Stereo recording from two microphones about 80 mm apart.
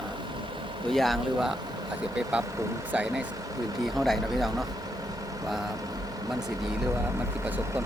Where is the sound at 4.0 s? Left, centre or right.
Centre.